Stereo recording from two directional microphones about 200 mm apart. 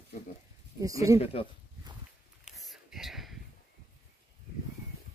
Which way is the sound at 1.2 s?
30° left (ahead or behind).